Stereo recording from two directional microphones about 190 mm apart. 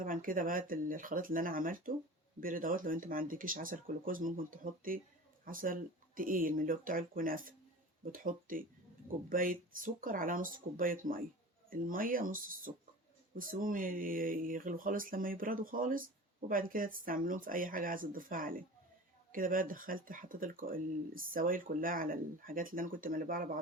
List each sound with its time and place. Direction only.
0.0 s speech: 45° right (ahead or behind)